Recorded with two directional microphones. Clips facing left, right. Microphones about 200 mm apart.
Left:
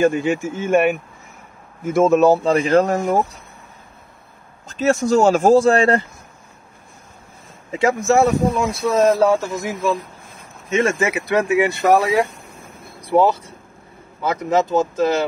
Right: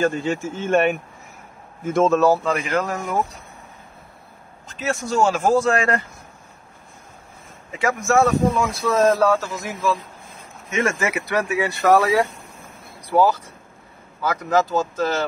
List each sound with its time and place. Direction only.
0.0 s speech: 15° left (ahead or behind)
2.1 s speech: 20° left (ahead or behind)
2.5 s speech: 35° left (ahead or behind)
4.6 s speech: 40° left (ahead or behind)
7.7 s speech: 25° left (ahead or behind)